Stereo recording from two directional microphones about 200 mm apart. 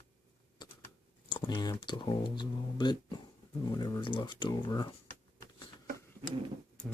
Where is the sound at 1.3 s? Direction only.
20° left (ahead or behind).